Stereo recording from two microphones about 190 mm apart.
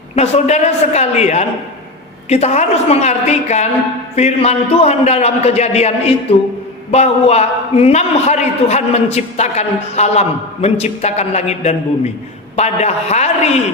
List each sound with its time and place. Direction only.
0.2 s a man's voice: 35° left (ahead or behind)